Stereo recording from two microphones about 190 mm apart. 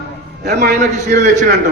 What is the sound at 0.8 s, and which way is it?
Speech, 40° right (ahead or behind).